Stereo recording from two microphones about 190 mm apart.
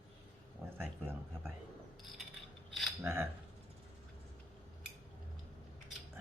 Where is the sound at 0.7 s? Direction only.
10° right (ahead or behind).